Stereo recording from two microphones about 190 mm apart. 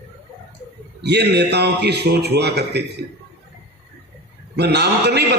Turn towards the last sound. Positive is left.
turn(degrees=-60)  # may be behind; listen again after turning